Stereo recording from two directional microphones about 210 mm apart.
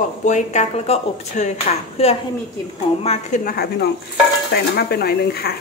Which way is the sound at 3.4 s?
50° left (ahead or behind).